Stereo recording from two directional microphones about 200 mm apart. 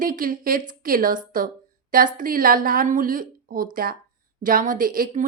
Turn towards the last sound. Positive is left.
turn(degrees=-45)  # may be behind; listen again after turning